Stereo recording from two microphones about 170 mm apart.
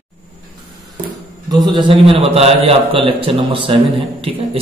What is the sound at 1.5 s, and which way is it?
A man's voice, 25° right (ahead or behind).